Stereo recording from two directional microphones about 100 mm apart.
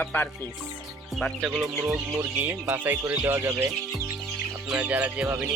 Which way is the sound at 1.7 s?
30° right (ahead or behind).